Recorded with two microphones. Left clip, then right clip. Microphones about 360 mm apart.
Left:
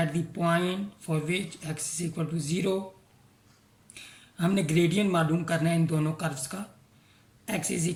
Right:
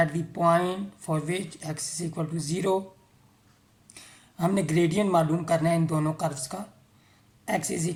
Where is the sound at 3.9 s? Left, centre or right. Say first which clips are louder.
Even; centre.